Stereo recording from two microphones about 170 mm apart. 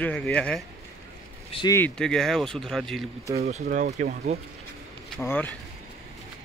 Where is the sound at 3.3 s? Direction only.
40° right (ahead or behind).